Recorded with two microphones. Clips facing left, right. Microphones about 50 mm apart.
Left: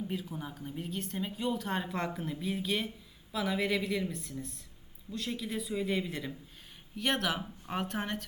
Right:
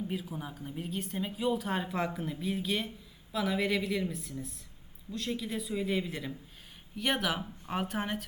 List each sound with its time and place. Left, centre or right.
0.0 s a woman's voice: centre